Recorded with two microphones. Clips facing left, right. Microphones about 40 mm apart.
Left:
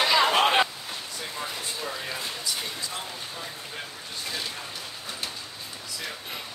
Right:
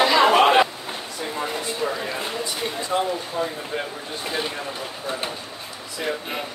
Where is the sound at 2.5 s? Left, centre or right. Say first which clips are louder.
Right 10 dB; right.